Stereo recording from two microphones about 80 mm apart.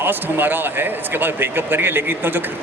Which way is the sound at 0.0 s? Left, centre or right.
Right.